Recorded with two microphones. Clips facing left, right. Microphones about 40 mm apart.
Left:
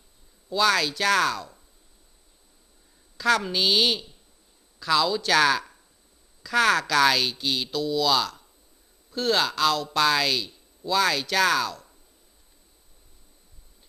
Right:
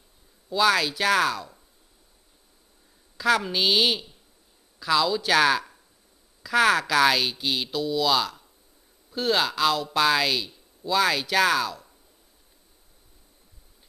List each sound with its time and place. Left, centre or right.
0.5 s speech: centre
3.2 s a woman's voice: centre